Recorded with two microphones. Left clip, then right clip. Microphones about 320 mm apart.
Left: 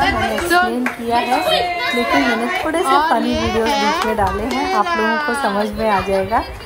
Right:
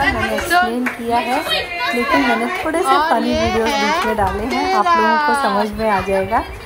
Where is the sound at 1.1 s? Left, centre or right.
Centre.